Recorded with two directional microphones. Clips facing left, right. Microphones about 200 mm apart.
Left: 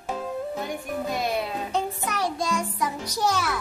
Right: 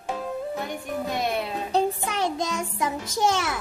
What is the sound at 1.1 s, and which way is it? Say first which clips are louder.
Speech: even; centre (ahead or behind).